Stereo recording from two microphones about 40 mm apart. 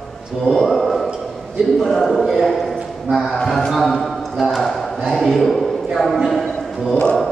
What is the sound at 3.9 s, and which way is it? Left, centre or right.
Music, centre.